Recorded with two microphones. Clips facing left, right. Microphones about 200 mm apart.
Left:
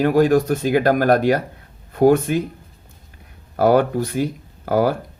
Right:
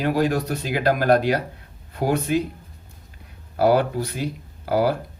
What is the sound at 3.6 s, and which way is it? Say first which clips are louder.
Speech: left 3 dB; 50° left (ahead or behind).